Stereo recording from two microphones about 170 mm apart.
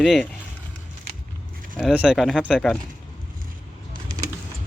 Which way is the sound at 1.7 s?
5° right (ahead or behind).